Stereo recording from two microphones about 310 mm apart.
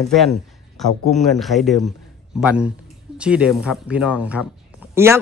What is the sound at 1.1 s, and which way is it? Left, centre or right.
A man's voice, centre.